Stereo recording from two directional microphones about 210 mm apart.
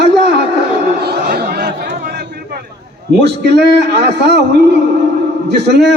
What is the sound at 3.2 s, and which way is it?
A man's voice, 55° right (ahead or behind).